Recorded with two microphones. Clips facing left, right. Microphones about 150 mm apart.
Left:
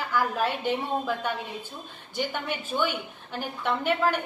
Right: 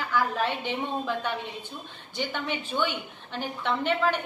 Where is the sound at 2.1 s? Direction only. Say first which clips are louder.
Left 1 dB; 10° left (ahead or behind).